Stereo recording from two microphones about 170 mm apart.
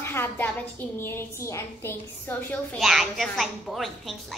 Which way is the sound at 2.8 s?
Centre (ahead or behind).